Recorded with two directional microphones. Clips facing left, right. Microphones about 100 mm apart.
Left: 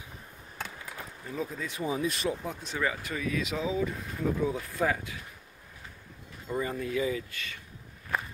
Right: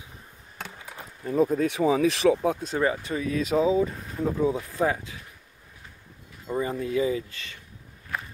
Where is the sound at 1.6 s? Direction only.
90° right.